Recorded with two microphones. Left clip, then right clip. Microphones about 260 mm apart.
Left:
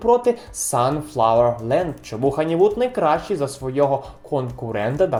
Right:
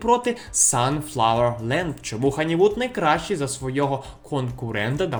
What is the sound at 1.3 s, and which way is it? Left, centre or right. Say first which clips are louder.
Speech: left 6 dB; right.